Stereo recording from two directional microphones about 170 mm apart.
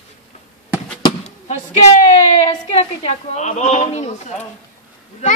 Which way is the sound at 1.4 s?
45° left (ahead or behind).